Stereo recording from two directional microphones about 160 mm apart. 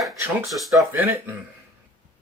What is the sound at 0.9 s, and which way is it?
Speech, 10° right (ahead or behind).